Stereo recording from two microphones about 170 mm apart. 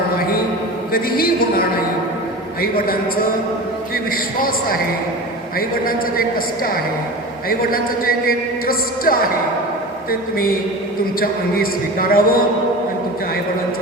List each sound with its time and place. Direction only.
0.9 s a man's voice: 60° left (ahead or behind)
3.9 s a man's voice: 60° left (ahead or behind)